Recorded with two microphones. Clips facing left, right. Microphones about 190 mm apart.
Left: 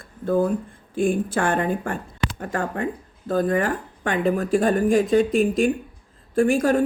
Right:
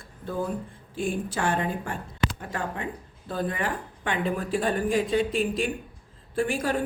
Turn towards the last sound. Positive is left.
turn(degrees=45)  # may be behind; listen again after turning